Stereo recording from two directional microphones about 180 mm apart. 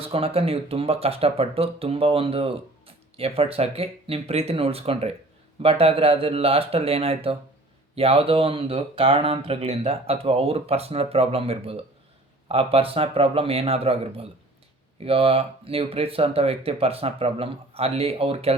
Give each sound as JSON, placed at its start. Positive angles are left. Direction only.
{"t": 0.0, "sound": "speech", "side_deg": -35}